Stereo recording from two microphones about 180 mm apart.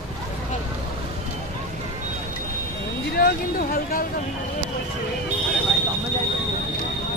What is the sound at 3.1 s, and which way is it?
Speech, 55° left (ahead or behind).